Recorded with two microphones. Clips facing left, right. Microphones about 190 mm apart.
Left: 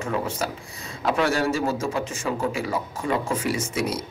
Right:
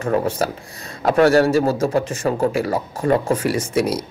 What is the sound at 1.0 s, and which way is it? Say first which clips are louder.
Speech: right 8 dB; 40° right (ahead or behind).